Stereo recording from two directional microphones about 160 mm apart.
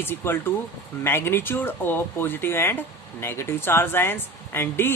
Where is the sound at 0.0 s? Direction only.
15° left (ahead or behind).